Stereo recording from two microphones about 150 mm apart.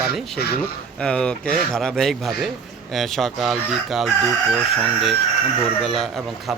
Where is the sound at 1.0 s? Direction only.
5° left (ahead or behind).